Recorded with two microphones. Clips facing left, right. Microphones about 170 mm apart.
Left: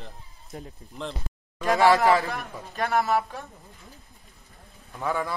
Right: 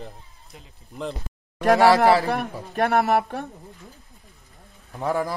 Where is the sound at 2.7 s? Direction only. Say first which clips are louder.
Right 4 dB; 60° right (ahead or behind).